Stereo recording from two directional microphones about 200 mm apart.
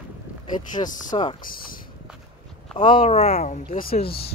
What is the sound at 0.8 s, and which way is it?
Speech, 20° left (ahead or behind).